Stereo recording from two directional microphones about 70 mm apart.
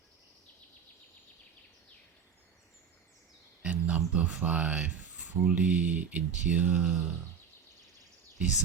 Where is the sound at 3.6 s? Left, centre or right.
Centre.